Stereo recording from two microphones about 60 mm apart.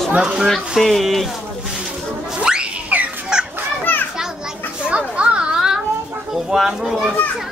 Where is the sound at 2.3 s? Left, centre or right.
Centre.